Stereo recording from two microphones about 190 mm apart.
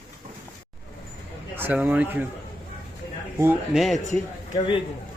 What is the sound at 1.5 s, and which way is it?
Speech, 10° right (ahead or behind).